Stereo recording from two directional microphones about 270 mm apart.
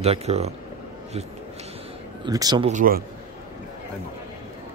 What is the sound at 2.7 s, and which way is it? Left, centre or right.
Speech, right.